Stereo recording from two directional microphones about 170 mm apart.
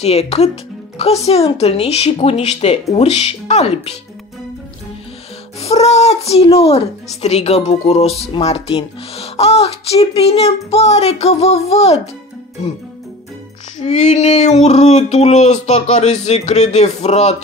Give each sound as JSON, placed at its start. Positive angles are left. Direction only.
{"t": 0.0, "sound": "a woman's voice", "side_deg": 40}
{"t": 5.6, "sound": "a woman's voice", "side_deg": 40}
{"t": 13.8, "sound": "a woman's voice", "side_deg": 40}